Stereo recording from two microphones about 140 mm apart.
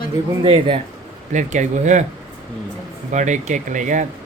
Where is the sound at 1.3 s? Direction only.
60° right (ahead or behind).